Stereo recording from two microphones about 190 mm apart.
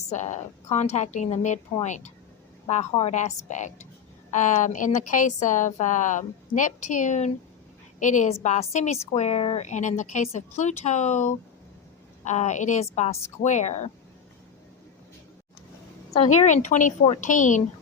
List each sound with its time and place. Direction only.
0.1 s a woman's voice: 35° left (ahead or behind)
16.1 s a woman's voice: 35° left (ahead or behind)